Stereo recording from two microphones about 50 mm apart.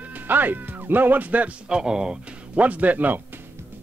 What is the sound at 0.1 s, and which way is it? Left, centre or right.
Speech, right.